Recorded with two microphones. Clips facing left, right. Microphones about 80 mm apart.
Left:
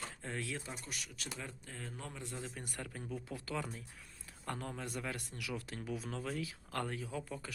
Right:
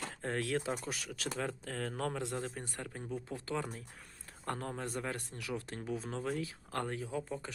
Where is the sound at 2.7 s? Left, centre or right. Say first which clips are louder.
Right 2 dB; right.